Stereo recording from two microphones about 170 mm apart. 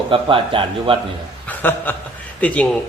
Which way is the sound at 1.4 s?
10° left (ahead or behind).